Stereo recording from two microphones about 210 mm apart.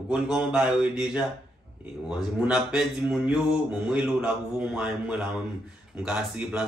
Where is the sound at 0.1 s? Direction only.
5° right (ahead or behind).